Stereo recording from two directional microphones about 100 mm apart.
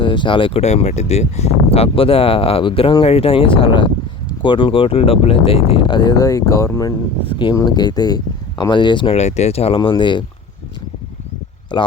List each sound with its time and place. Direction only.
0.0 s speech: 55° left (ahead or behind)
3.0 s speech: 80° left; by 6.1 s 50° left (ahead or behind)
6.1 s speech: 35° left (ahead or behind)
7.3 s speech: 50° left (ahead or behind)
9.1 s speech: 90° left
9.9 s speech: 50° left (ahead or behind)
11.7 s speech: 50° left (ahead or behind)